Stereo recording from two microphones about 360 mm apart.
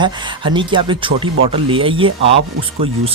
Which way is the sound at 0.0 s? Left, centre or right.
Centre.